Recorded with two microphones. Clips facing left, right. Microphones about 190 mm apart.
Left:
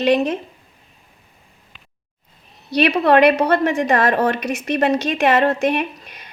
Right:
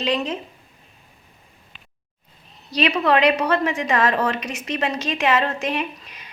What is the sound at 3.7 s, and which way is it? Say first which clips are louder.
A woman's voice: left 4 dB; 50° left (ahead or behind).